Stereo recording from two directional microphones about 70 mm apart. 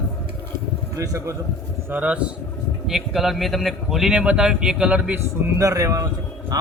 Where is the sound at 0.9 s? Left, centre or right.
Right.